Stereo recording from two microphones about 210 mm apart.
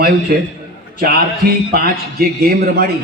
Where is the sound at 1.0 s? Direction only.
45° right (ahead or behind).